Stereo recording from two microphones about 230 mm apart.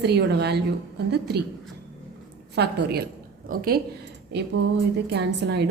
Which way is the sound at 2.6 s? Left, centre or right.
Right.